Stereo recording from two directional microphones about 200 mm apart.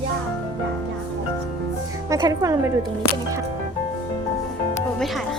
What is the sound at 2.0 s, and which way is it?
Speech, 15° right (ahead or behind).